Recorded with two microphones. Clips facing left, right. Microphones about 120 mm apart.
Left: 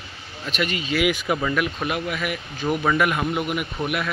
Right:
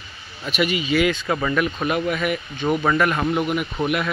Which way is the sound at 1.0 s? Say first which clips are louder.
Left 2 dB; 10° left (ahead or behind).